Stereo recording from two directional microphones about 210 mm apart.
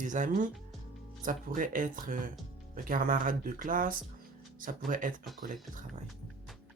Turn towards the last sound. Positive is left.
turn(degrees=-40)  # may be behind; listen again after turning